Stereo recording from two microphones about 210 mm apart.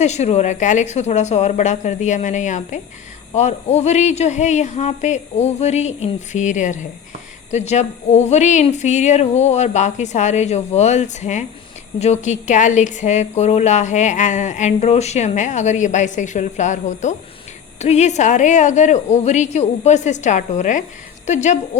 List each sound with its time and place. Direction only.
0.0 s speech: 30° left (ahead or behind)